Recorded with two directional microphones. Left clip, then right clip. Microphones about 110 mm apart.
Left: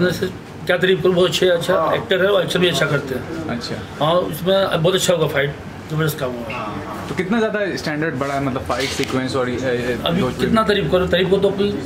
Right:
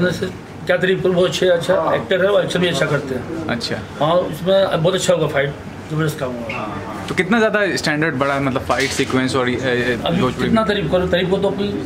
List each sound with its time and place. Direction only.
0.0 s a man's voice: centre (ahead or behind)
4.0 s a man's voice: centre (ahead or behind)
7.2 s speech: 45° right (ahead or behind)
10.5 s a man's voice: centre (ahead or behind)